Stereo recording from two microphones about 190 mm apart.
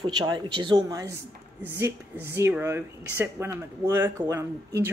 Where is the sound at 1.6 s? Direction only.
10° right (ahead or behind).